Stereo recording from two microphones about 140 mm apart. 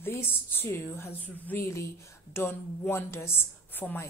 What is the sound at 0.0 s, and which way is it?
A woman's voice, 15° left (ahead or behind).